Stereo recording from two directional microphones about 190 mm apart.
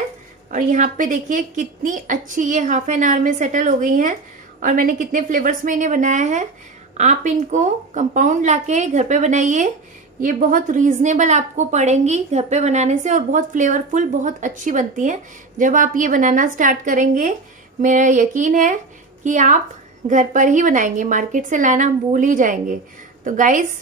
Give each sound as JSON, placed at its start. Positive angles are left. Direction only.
{"t": 0.5, "sound": "a woman's voice", "side_deg": -40}